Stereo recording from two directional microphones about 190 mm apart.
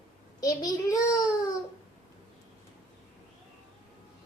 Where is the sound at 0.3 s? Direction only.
20° left (ahead or behind).